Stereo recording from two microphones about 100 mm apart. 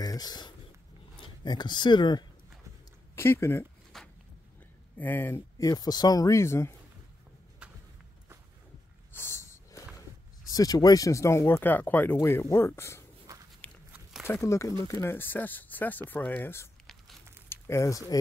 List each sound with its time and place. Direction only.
0.0 s a sound: 40° left (ahead or behind)
1.2 s speech: 45° left (ahead or behind)
3.2 s speech: 25° left (ahead or behind)
3.9 s a sound: 5° left (ahead or behind)
4.9 s speech: 20° left (ahead or behind)
5.6 s speech: 40° left (ahead or behind)
9.1 s a sound: 25° left (ahead or behind)
10.5 s speech: 40° left (ahead or behind)
13.6 s biting: 15° left (ahead or behind)
14.2 s speech: 25° left (ahead or behind)
15.1 s speech: 20° left (ahead or behind)